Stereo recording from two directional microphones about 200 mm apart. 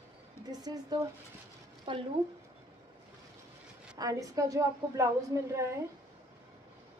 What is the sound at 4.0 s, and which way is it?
A woman's voice, 15° right (ahead or behind).